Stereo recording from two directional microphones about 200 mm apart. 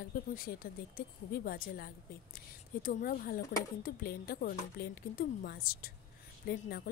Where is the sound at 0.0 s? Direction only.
45° left (ahead or behind).